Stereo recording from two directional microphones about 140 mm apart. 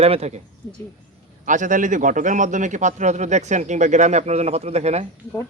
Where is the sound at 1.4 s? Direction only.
65° right (ahead or behind); by 5.0 s 50° right (ahead or behind).